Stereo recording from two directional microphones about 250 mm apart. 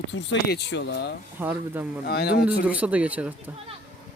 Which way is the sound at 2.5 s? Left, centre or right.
Centre.